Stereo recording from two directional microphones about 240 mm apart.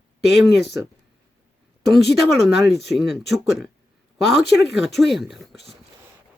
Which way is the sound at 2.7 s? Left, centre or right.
Centre.